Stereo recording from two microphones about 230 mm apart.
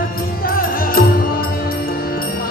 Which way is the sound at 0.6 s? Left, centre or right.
Left.